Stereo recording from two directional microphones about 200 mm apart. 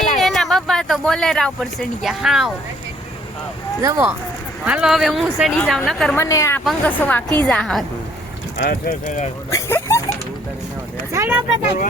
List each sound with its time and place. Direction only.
0.2 s speech: centre (ahead or behind)
3.8 s speech: 15° right (ahead or behind)
4.6 s speech: 5° right (ahead or behind)
6.1 s a woman's voice: 15° left (ahead or behind)
8.5 s speech: 50° left (ahead or behind)
9.5 s a sound: 15° left (ahead or behind)
11.1 s speech: 10° right (ahead or behind)